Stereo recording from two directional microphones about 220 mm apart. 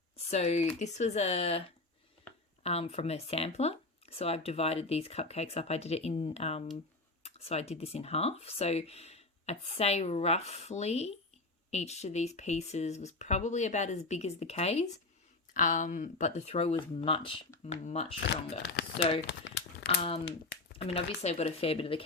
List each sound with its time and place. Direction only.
0.3 s speech: 30° left (ahead or behind)
2.6 s speech: 30° left (ahead or behind)
18.6 s speech: 50° left (ahead or behind)
19.3 s crumpling: 55° left (ahead or behind)
20.7 s speech: 25° left (ahead or behind)